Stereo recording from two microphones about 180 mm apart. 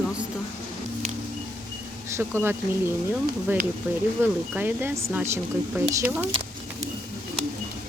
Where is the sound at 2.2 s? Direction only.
10° right (ahead or behind).